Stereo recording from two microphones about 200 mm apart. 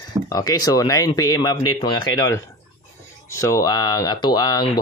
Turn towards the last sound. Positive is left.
turn(degrees=20)  # may be behind; listen again after turning